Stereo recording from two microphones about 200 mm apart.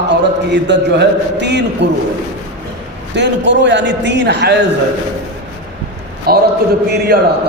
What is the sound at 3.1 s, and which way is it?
Speech, 60° right (ahead or behind).